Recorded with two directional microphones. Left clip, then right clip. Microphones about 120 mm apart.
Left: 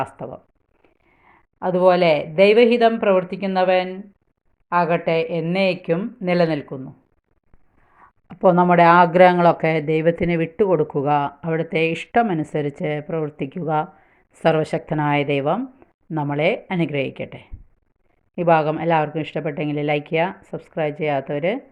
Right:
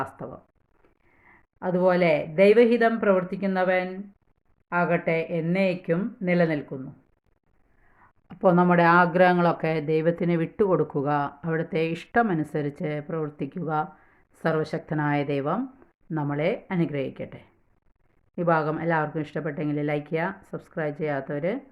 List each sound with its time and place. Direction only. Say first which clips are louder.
0.2 s speech: left 6 dB; 15° left (ahead or behind)
8.3 s speech: left 5 dB; 10° left (ahead or behind)